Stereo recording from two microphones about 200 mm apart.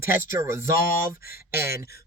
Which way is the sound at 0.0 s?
10° right (ahead or behind).